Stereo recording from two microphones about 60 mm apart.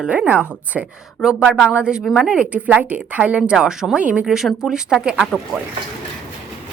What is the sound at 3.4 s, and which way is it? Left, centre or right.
Speech, centre.